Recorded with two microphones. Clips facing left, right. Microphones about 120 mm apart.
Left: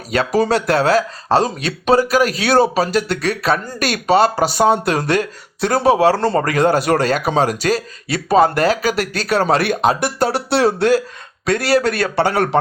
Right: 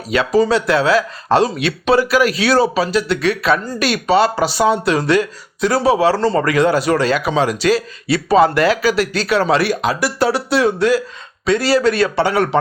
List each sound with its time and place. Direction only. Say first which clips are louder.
0.3 s speech: right 1 dB; 50° left (ahead or behind)